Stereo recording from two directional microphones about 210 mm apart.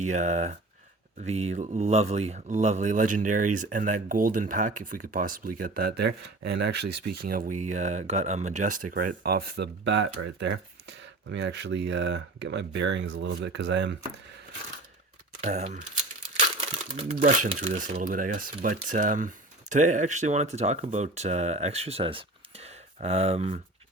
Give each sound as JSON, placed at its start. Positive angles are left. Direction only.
{"t": 0.1, "sound": "speech", "side_deg": -35}
{"t": 15.4, "sound": "speech", "side_deg": -35}